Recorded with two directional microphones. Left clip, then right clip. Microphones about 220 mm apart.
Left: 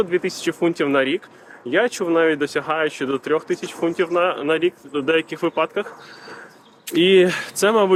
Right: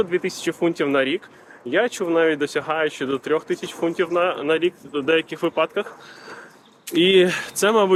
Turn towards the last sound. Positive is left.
turn(degrees=-5)  # may be behind; listen again after turning